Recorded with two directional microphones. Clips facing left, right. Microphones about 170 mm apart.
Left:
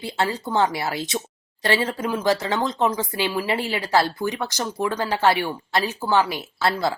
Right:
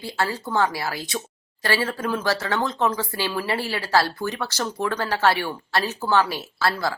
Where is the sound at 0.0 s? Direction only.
20° left (ahead or behind).